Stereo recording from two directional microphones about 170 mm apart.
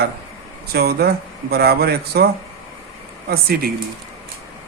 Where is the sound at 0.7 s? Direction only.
70° right (ahead or behind).